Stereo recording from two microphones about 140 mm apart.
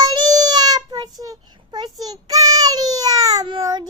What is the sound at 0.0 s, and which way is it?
Child singing, 30° right (ahead or behind).